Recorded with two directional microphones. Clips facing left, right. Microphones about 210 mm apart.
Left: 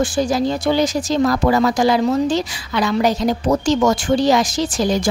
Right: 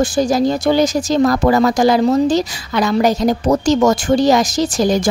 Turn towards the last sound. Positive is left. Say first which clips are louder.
# right 3 dB
turn(degrees=-45)  # may be behind; listen again after turning